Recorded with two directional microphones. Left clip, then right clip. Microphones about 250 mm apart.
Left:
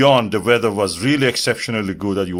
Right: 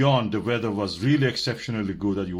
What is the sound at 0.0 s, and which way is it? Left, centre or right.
Speech, left.